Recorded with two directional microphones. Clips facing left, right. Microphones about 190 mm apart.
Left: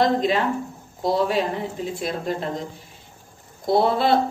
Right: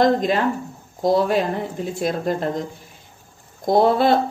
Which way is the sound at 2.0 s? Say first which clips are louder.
Right 6 dB; 45° right (ahead or behind).